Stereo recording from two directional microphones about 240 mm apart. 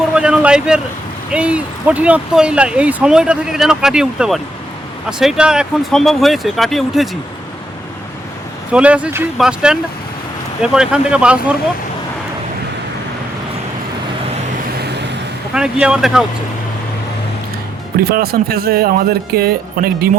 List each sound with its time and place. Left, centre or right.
0.1 s a man's voice: centre
8.7 s speech: centre
14.8 s vehicle: right
15.5 s speech: centre
18.0 s speech: right